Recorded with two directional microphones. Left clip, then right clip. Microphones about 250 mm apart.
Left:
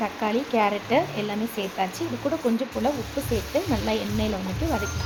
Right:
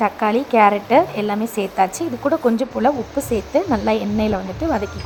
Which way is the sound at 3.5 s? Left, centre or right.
Right.